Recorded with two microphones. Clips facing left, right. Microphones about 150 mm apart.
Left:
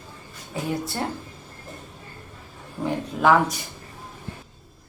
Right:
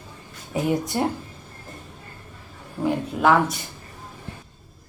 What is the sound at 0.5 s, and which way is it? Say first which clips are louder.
Speech: right 5 dB; 20° right (ahead or behind).